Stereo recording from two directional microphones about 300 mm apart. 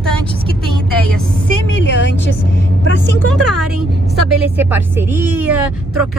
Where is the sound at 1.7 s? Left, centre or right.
Left.